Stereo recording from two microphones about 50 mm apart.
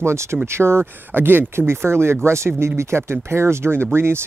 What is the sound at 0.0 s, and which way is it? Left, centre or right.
Speech, right.